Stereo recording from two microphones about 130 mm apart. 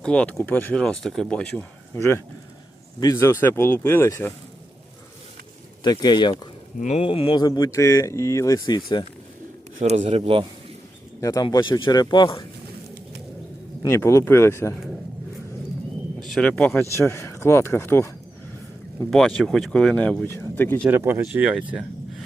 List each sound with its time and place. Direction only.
0.0 s speech: 10° left (ahead or behind)
1.9 s speech: 20° left (ahead or behind)
5.8 s speech: 30° left (ahead or behind)
6.7 s speech: 65° left (ahead or behind)
7.0 s speech: 45° left (ahead or behind)
9.8 s speech: 55° right (ahead or behind)
11.2 s speech: 25° left (ahead or behind)
13.8 s speech: 20° left (ahead or behind)
16.3 s speech: 5° left (ahead or behind)
17.1 s speech: 20° left (ahead or behind)
19.1 s speech: centre (ahead or behind)
20.9 s speech: 20° right (ahead or behind)